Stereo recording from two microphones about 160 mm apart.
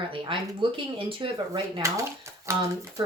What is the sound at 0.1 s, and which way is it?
Speech, 35° right (ahead or behind).